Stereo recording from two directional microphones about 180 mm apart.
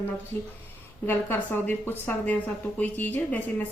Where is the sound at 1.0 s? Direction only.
10° left (ahead or behind).